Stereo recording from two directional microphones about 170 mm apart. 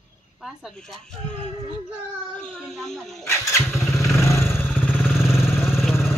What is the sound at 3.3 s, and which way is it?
Motorcycle, 15° left (ahead or behind).